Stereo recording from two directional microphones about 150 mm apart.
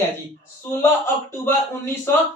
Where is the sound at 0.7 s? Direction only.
15° left (ahead or behind).